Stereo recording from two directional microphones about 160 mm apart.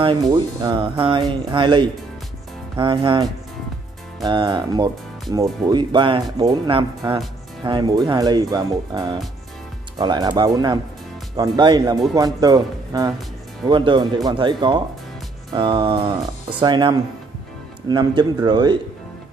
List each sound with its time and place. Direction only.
0.0 s speech: 30° right (ahead or behind)